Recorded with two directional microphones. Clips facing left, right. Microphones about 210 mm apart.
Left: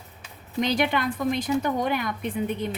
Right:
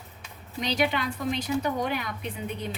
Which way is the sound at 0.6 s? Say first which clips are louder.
Left 3 dB; 50° left (ahead or behind).